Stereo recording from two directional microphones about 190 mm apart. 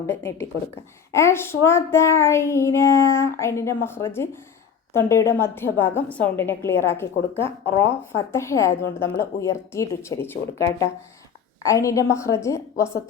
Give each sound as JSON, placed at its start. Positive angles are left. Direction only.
{"t": 0.0, "sound": "child singing", "side_deg": 15}